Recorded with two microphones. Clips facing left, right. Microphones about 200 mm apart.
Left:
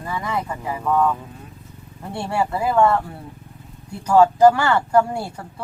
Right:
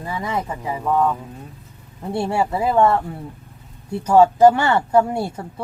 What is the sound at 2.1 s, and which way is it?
Speech, 25° right (ahead or behind).